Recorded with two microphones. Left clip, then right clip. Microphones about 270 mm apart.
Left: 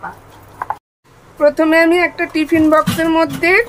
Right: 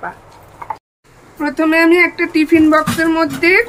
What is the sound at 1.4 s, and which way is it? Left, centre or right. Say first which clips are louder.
Speech: left 2 dB; centre.